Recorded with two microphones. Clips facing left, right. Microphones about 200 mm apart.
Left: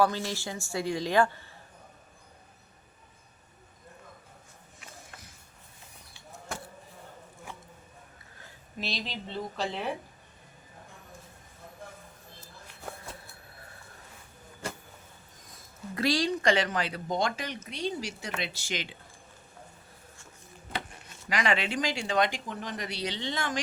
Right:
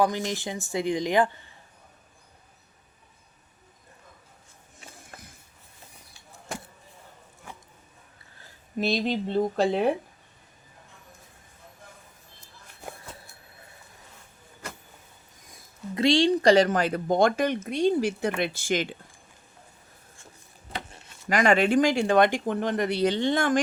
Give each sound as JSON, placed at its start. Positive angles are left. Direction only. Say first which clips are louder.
{"t": 0.0, "sound": "a woman's voice", "louder": "right 2 dB", "side_deg": -15}
{"t": 8.8, "sound": "speech", "louder": "right 11 dB", "side_deg": -50}
{"t": 16.0, "sound": "speech", "louder": "right 7 dB", "side_deg": -25}
{"t": 21.2, "sound": "speech", "louder": "right 8 dB", "side_deg": -50}